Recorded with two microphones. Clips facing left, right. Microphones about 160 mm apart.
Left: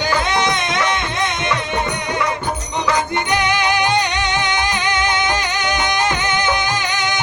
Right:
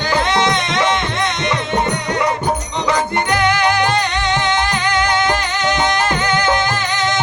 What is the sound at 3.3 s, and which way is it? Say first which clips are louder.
Music: right 2 dB; 15° left (ahead or behind).